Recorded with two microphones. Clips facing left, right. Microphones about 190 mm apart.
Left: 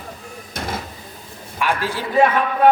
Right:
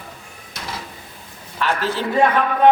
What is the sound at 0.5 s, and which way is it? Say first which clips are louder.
Cupboard open or close: left 5 dB; 50° left (ahead or behind).